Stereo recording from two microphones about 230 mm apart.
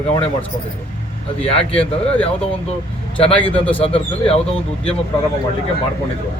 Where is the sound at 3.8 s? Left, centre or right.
Left.